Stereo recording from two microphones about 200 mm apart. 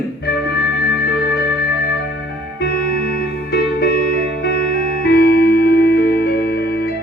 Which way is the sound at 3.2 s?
50° left (ahead or behind).